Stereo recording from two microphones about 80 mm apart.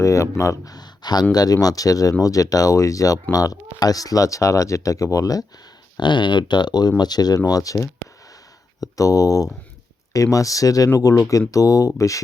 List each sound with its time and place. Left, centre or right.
0.0 s speech: left
6.0 s speech: left
8.8 s speech: left